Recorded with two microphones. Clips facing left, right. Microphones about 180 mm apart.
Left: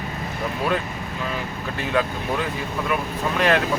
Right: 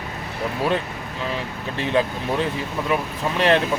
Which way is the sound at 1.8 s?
30° right (ahead or behind).